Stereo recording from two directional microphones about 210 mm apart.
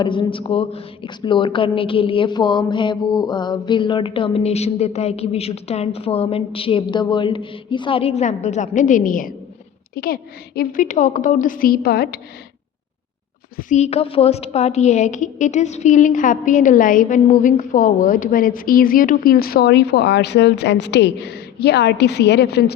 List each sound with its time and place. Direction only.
0.0 s a woman's voice: 25° left (ahead or behind); by 12.2 s 45° left (ahead or behind)
13.6 s a woman's voice: 35° left (ahead or behind); by 22.7 s 50° left (ahead or behind)